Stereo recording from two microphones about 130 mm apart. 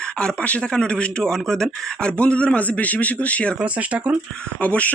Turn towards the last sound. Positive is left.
turn(degrees=10)  # may be behind; listen again after turning